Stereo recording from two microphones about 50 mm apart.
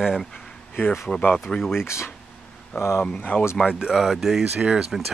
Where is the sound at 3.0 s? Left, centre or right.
Left.